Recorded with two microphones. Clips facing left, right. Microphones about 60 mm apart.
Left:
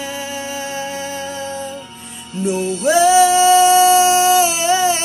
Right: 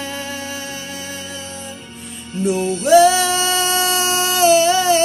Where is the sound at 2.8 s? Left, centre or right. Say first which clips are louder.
Even; centre.